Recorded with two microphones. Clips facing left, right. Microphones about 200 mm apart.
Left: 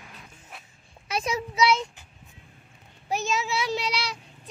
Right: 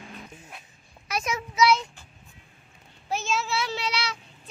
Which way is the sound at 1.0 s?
30° left (ahead or behind).